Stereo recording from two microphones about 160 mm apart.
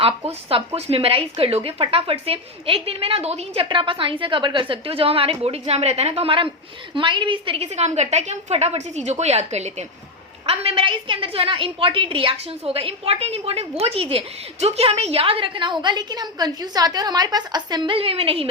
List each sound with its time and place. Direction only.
0.0 s a woman's voice: 35° right (ahead or behind)